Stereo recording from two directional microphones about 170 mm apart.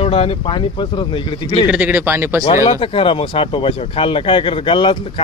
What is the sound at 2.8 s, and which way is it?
Speech, 35° left (ahead or behind).